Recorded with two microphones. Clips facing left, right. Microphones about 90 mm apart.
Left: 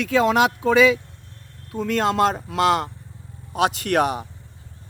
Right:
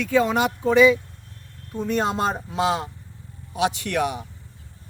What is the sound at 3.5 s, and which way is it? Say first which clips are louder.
Speech: left 3 dB; 45° left (ahead or behind).